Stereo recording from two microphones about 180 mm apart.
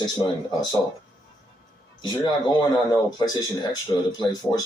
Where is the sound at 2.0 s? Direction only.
25° left (ahead or behind).